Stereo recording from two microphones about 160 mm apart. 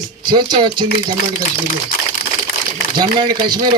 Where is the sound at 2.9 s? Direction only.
25° right (ahead or behind).